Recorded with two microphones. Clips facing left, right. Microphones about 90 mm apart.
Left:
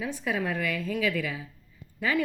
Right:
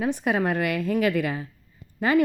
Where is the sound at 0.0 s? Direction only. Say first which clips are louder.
Right 6 dB; 60° right (ahead or behind).